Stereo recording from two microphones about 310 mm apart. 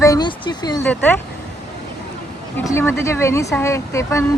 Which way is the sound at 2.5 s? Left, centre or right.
Centre.